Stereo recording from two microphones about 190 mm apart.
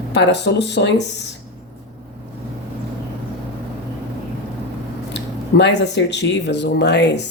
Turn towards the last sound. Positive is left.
turn(degrees=65)  # may be behind; listen again after turning